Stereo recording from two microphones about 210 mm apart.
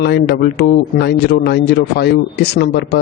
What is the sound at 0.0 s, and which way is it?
Speech, 55° left (ahead or behind).